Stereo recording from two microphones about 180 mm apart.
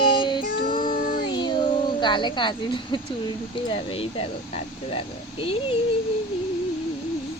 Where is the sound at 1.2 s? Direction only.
25° left (ahead or behind).